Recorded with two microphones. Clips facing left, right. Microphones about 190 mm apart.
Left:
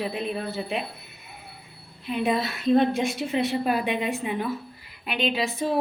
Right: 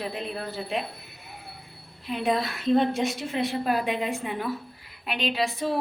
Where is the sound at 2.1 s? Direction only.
Centre (ahead or behind).